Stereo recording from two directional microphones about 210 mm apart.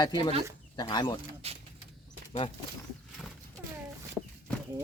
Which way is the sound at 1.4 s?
30° right (ahead or behind).